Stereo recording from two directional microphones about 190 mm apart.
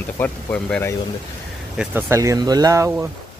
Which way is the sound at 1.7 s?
10° right (ahead or behind).